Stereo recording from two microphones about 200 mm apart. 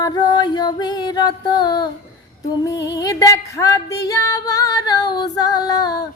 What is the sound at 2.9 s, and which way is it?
Female singing, 15° left (ahead or behind).